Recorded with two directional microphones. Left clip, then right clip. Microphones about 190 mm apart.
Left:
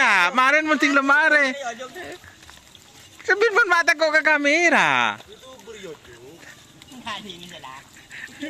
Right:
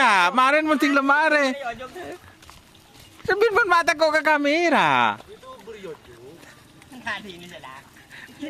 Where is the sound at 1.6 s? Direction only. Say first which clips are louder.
Even; 50° left (ahead or behind).